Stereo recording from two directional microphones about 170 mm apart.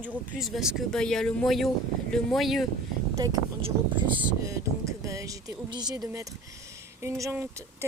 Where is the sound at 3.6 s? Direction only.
30° right (ahead or behind).